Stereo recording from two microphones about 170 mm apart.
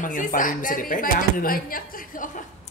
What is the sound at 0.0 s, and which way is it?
A woman's voice, 50° left (ahead or behind).